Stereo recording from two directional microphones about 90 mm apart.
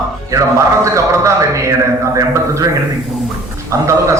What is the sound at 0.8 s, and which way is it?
A man's voice, 35° right (ahead or behind).